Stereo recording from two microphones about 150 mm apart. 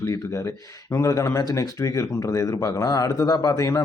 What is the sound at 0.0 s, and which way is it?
Speech, 20° left (ahead or behind).